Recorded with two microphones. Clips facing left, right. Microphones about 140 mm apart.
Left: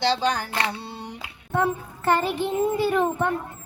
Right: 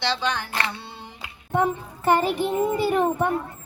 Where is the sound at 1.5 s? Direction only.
15° right (ahead or behind).